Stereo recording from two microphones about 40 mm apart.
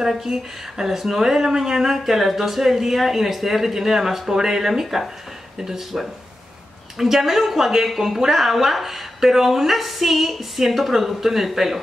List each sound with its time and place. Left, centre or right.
0.0 s speech: centre
5.9 s speech: centre
7.0 s a woman's voice: centre